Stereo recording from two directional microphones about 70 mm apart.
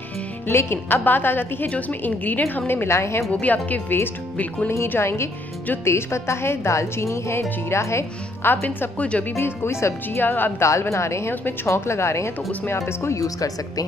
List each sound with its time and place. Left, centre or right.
0.5 s a woman's voice: left
3.3 s a woman's voice: centre; by 8.5 s left
8.5 s a woman's voice: left
9.4 s speech: left
10.2 s a woman's voice: left
10.6 s speech: left